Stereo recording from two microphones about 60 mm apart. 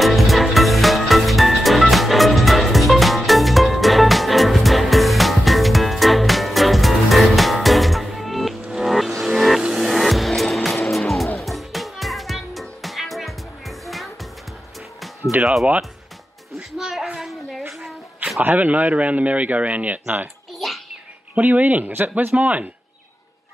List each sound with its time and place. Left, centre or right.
0.0 s music: centre
9.6 s music: centre
9.8 s music: centre
16.7 s a sound: centre
18.4 s speech: right
20.5 s a sound: centre
21.4 s speech: right